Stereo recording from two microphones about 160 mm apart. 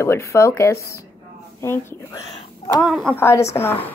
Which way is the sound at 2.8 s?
Centre (ahead or behind).